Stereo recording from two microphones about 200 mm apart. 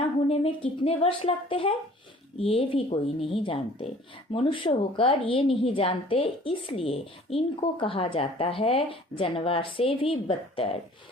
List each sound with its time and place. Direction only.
0.3 s speech: 30° left (ahead or behind)